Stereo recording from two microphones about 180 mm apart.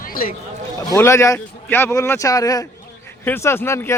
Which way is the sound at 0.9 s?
15° left (ahead or behind).